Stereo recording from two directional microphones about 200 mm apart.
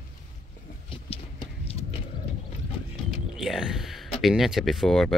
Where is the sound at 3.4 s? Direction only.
Centre (ahead or behind).